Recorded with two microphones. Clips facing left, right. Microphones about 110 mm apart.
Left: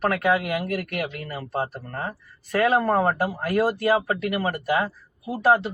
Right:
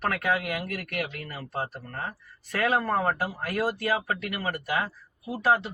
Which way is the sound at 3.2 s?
40° left (ahead or behind).